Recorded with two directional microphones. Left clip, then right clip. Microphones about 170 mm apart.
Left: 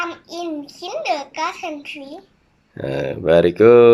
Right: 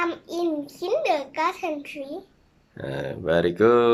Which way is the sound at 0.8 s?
20° right (ahead or behind).